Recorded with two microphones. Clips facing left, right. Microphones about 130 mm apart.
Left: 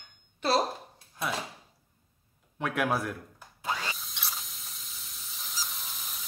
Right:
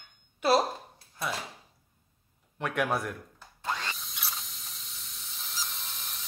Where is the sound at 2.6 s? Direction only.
Centre (ahead or behind).